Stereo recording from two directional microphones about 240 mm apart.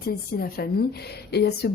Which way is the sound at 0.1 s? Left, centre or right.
Left.